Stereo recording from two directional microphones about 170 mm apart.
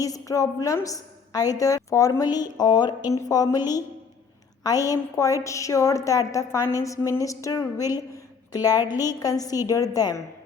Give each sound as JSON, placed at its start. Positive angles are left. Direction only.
{"t": 0.0, "sound": "a woman's voice", "side_deg": 20}
{"t": 4.6, "sound": "a woman's voice", "side_deg": 20}